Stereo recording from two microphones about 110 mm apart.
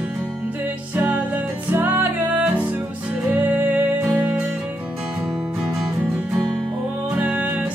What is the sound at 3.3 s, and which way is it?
Music, 15° right (ahead or behind).